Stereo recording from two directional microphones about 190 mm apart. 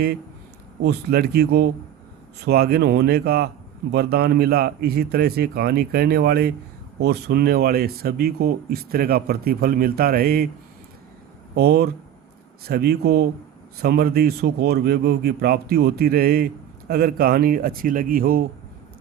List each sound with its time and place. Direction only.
0.9 s a man's voice: 55° right (ahead or behind)
11.5 s a man's voice: 55° right (ahead or behind)